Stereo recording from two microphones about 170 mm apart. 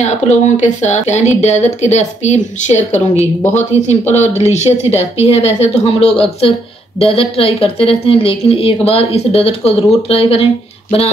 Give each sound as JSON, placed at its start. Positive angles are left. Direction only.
{"t": 0.0, "sound": "a woman's voice", "side_deg": 45}